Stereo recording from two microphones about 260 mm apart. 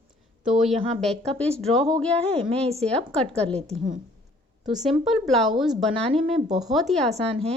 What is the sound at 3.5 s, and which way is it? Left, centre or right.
Speech, right.